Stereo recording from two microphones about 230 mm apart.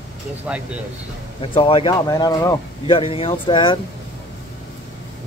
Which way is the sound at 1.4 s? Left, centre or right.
Left.